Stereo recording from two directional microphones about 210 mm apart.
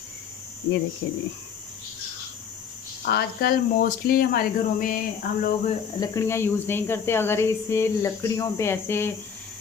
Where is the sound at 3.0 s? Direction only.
50° left (ahead or behind).